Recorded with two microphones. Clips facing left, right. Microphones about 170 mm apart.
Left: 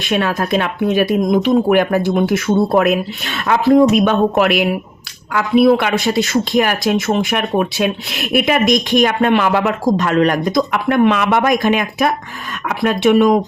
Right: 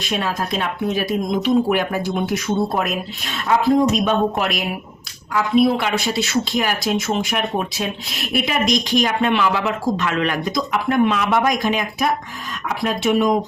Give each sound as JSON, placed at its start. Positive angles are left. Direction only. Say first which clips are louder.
{"t": 0.1, "sound": "speech", "louder": "left 7 dB", "side_deg": 70}
{"t": 2.1, "sound": "speech", "louder": "left 5 dB", "side_deg": 70}